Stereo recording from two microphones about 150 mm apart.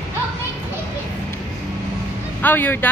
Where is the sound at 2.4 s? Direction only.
15° left (ahead or behind).